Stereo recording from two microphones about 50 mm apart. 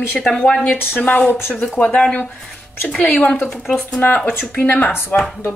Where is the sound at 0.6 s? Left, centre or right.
Left.